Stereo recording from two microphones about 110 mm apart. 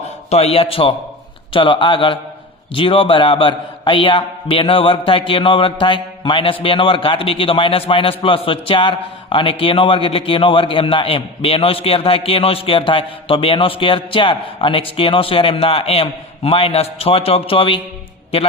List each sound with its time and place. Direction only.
0.3 s a man's voice: 70° left (ahead or behind)